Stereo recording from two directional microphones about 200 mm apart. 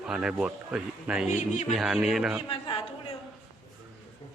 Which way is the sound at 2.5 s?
25° left (ahead or behind).